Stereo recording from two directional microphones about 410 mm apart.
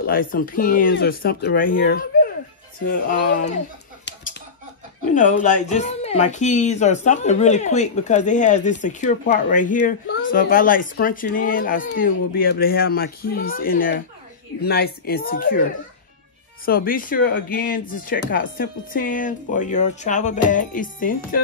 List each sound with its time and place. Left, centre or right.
0.0 s speech: left
4.0 s chicken: left
5.1 s speech: centre
16.6 s speech: left